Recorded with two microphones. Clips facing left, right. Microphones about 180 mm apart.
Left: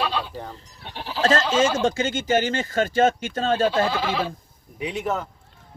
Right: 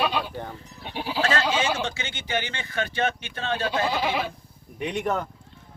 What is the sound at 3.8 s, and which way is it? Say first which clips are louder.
Speech: left 1 dB; 15° right (ahead or behind).